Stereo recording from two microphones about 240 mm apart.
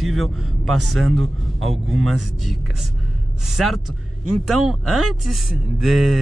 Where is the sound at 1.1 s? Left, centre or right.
Right.